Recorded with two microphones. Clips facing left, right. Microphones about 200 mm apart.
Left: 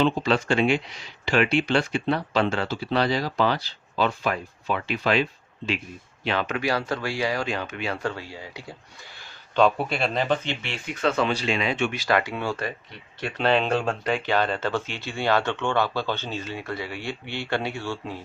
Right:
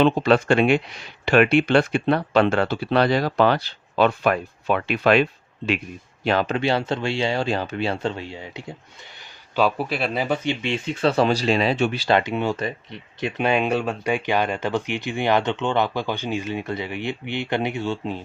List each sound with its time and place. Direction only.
0.0 s speech: 60° right (ahead or behind)
6.2 s speech: 40° right (ahead or behind); by 8.7 s 20° right (ahead or behind)
9.6 s speech: 5° right (ahead or behind); by 18.2 s 20° right (ahead or behind)